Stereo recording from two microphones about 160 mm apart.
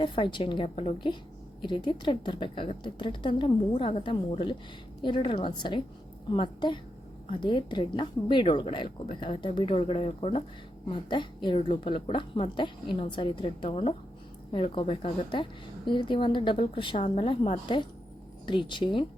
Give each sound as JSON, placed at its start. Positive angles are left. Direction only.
{"t": 0.0, "sound": "a woman's voice", "side_deg": 30}